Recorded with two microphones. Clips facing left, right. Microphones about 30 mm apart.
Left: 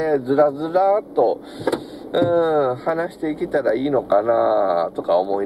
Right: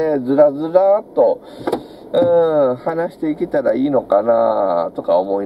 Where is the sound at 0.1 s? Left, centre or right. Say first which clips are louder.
Right 2 dB; left.